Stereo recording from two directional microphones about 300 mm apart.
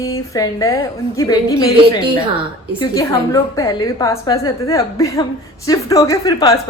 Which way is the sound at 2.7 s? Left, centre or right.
Centre.